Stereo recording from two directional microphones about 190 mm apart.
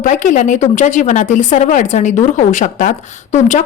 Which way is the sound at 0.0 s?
40° left (ahead or behind).